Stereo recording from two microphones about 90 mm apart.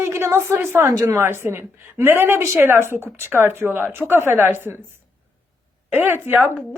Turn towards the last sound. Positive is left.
turn(degrees=-25)  # may be behind; listen again after turning